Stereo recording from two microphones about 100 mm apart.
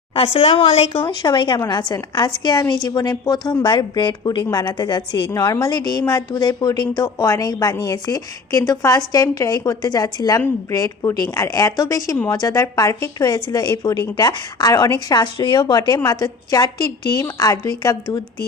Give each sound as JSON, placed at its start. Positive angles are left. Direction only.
{"t": 0.1, "sound": "a woman's voice", "side_deg": 70}